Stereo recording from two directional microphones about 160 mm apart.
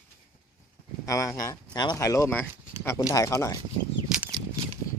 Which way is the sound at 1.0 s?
20° left (ahead or behind).